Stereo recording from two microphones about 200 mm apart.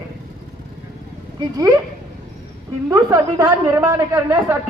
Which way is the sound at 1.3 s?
20° right (ahead or behind).